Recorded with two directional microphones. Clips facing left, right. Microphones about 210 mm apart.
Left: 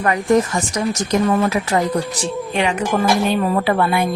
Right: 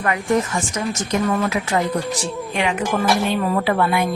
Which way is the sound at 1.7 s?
40° left (ahead or behind).